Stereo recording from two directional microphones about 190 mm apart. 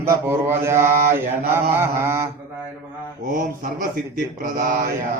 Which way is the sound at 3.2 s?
45° right (ahead or behind).